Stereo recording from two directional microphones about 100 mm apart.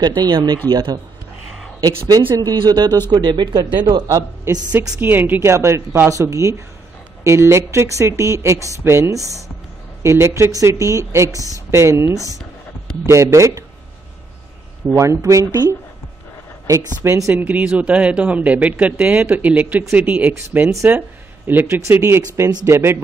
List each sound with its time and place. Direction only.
0.0 s a man's voice: 45° right (ahead or behind)
3.8 s a man's voice: 35° right (ahead or behind)
5.0 s speech: 20° right (ahead or behind)
15.0 s a man's voice: 30° right (ahead or behind)